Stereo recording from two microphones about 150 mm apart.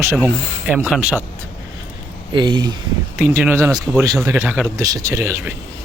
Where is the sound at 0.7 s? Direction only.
10° right (ahead or behind).